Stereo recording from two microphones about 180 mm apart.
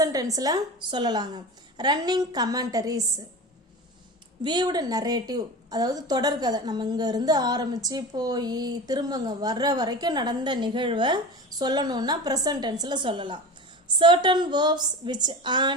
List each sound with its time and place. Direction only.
0.0 s a woman's voice: 20° right (ahead or behind)
4.4 s a woman's voice: 25° right (ahead or behind)